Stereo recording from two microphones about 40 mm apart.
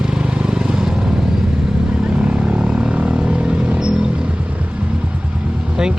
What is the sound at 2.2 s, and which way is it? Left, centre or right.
Vehicle, right.